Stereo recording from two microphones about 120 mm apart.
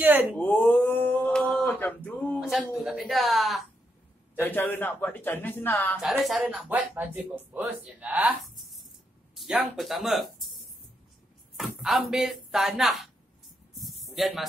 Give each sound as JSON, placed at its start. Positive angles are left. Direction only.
{"t": 0.0, "sound": "speech", "side_deg": -15}
{"t": 0.4, "sound": "mantra", "side_deg": 15}
{"t": 1.6, "sound": "male singing", "side_deg": 15}
{"t": 2.4, "sound": "speech", "side_deg": 0}
{"t": 4.4, "sound": "speech", "side_deg": 15}
{"t": 5.9, "sound": "speech", "side_deg": -5}
{"t": 6.7, "sound": "speech", "side_deg": -15}
{"t": 8.4, "sound": "a sound", "side_deg": 0}
{"t": 9.3, "sound": "speech", "side_deg": -5}
{"t": 13.7, "sound": "a sound", "side_deg": 0}